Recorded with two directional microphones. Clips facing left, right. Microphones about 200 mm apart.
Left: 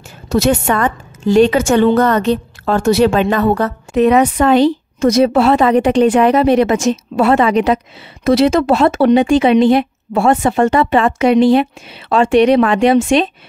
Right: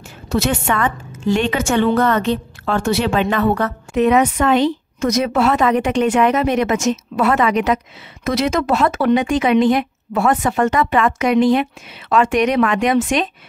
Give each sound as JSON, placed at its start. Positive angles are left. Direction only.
{"t": 0.3, "sound": "a woman's voice", "side_deg": 40}